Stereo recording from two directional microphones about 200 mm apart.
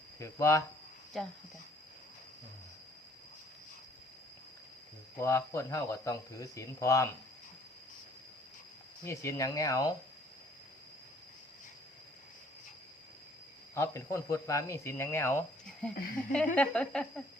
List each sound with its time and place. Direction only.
0.2 s speech: 15° left (ahead or behind)
1.2 s speech: centre (ahead or behind)
5.1 s speech: 15° left (ahead or behind)
9.0 s speech: 15° left (ahead or behind)
13.7 s speech: 15° left (ahead or behind)
16.0 s speech: 45° left (ahead or behind)
16.6 s speech: 5° left (ahead or behind)